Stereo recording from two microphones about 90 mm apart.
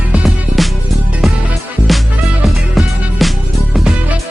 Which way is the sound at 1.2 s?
Centre (ahead or behind).